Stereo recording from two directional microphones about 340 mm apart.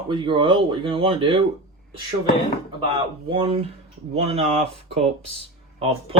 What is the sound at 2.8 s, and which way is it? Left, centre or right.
Speech, centre.